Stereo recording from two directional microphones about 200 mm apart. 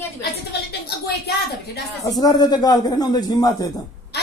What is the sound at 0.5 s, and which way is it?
Speech, 55° left (ahead or behind).